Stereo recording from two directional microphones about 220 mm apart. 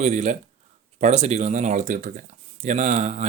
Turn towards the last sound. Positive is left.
turn(degrees=-30)  # may be behind; listen again after turning